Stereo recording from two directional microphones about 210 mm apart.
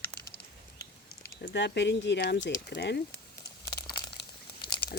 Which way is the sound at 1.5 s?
55° left (ahead or behind).